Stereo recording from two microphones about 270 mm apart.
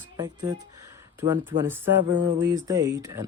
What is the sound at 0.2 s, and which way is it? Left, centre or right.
Speech, centre.